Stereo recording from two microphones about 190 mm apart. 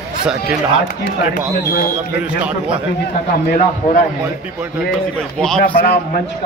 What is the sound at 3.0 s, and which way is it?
Speech, 55° left (ahead or behind).